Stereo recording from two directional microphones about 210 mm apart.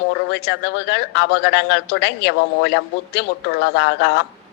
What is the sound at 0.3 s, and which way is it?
Speech, 55° left (ahead or behind).